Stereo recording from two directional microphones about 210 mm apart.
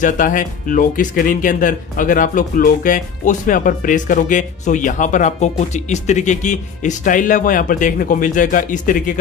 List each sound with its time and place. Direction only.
0.0 s speech: 35° left (ahead or behind)